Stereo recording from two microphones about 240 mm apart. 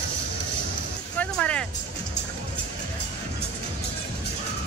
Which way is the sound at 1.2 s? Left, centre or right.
Centre.